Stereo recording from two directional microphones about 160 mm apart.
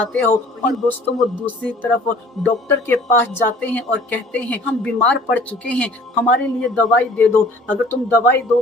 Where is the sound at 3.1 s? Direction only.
15° left (ahead or behind).